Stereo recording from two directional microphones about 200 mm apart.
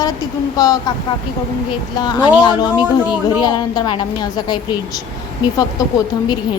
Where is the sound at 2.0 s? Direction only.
20° left (ahead or behind).